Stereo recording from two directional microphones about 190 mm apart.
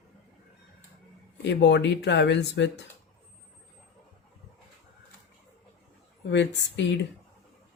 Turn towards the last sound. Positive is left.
turn(degrees=65)  # may be behind; listen again after turning